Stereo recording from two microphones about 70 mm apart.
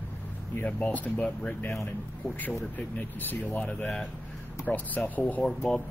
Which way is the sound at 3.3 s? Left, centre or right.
Left.